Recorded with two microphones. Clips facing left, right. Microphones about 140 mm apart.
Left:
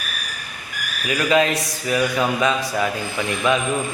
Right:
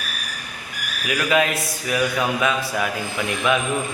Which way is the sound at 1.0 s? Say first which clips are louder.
Left 2 dB; 5° right (ahead or behind).